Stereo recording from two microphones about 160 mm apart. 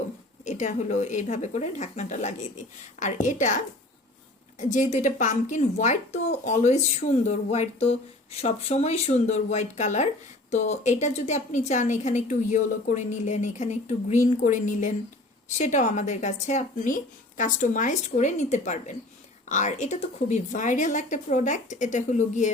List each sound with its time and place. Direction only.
0.4 s speech: 50° left (ahead or behind)